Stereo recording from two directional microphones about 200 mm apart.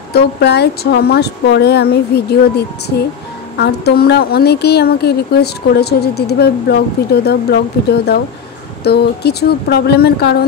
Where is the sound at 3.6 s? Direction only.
55° left (ahead or behind).